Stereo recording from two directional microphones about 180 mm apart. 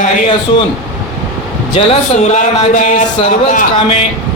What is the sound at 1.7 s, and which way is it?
Speech, 35° left (ahead or behind).